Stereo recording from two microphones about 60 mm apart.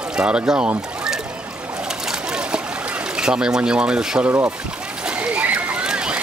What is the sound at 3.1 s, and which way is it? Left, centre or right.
Speech, centre.